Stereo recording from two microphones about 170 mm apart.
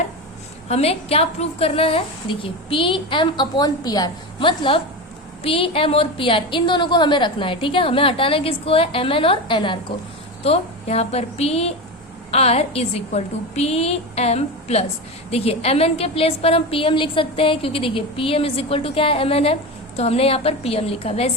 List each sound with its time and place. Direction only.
0.7 s a woman's voice: 35° left (ahead or behind)